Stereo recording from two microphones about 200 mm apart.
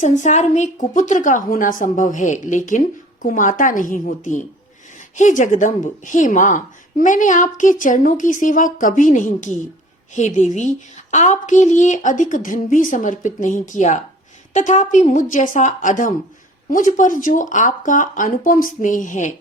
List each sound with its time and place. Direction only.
0.0 s a woman's voice: 35° left (ahead or behind)